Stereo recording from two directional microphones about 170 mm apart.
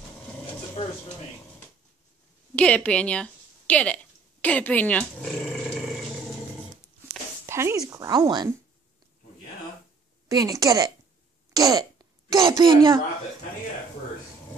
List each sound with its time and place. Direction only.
0.8 s a sound: 35° left (ahead or behind)
2.5 s a woman's voice: 5° left (ahead or behind)
7.4 s a sound: 15° right (ahead or behind)
7.9 s a woman's voice: 20° right (ahead or behind)
10.2 s a woman's voice: 20° right (ahead or behind)
11.5 s throat clearing: 20° right (ahead or behind)
12.3 s a woman's voice: 25° right (ahead or behind)